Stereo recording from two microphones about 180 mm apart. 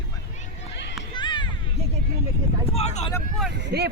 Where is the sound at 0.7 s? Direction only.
75° left (ahead or behind).